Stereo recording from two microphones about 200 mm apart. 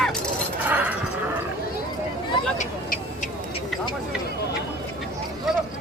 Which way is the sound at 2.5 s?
40° left (ahead or behind).